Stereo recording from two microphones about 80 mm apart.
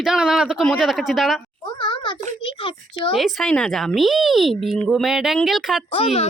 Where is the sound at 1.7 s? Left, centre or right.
Left.